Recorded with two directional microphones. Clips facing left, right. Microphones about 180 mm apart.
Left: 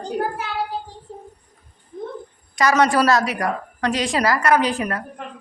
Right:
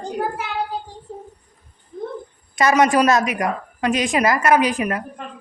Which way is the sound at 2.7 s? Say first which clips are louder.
Right 2 dB; 15° right (ahead or behind).